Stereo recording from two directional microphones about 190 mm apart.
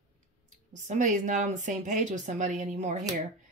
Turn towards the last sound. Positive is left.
turn(degrees=-40)  # may be behind; listen again after turning